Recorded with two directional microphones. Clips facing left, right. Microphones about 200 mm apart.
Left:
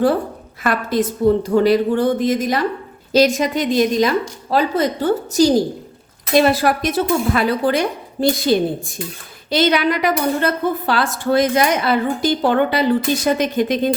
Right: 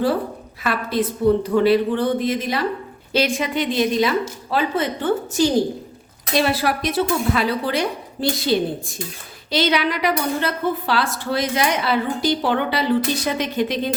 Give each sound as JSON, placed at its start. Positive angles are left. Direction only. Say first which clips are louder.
{"t": 0.6, "sound": "a woman's voice", "louder": "left 3 dB", "side_deg": 45}